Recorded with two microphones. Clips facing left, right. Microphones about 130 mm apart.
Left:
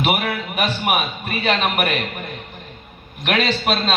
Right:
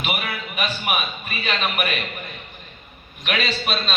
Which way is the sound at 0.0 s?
60° left (ahead or behind).